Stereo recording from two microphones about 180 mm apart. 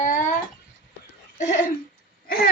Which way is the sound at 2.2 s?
55° left (ahead or behind).